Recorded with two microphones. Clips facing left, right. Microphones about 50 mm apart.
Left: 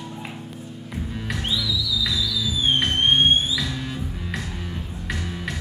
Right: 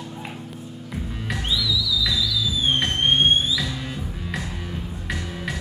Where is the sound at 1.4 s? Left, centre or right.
Centre.